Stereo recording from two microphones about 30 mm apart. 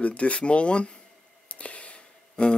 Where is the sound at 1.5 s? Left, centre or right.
Left.